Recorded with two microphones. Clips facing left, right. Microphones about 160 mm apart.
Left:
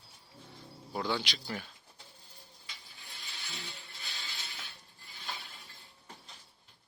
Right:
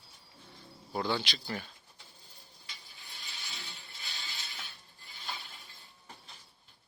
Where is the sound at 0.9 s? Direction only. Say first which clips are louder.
Right 1 dB; 10° right (ahead or behind).